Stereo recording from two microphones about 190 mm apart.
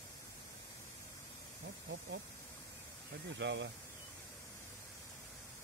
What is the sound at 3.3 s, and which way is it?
Speech, 70° right (ahead or behind).